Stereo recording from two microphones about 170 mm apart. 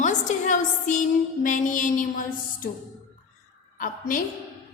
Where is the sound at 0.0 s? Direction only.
45° left (ahead or behind).